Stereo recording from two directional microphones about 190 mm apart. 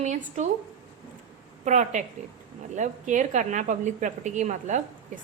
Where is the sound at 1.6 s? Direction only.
40° right (ahead or behind).